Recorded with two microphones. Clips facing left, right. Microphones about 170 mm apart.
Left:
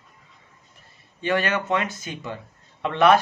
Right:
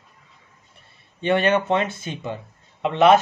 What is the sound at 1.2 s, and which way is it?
Speech, 25° right (ahead or behind).